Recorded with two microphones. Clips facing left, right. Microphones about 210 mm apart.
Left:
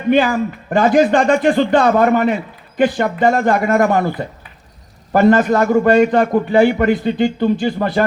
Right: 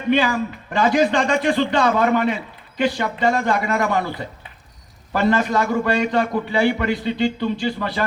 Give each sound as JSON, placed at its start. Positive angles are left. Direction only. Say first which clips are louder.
{"t": 0.1, "sound": "a man's voice", "louder": "left 5 dB", "side_deg": 50}